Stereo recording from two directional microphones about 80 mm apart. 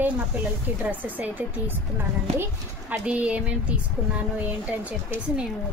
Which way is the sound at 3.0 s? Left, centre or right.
Centre.